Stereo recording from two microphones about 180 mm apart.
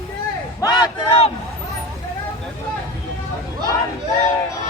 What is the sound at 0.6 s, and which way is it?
Battle cry, 20° left (ahead or behind).